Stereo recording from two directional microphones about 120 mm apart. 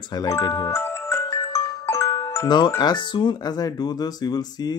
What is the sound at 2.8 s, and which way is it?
Speech, 40° left (ahead or behind).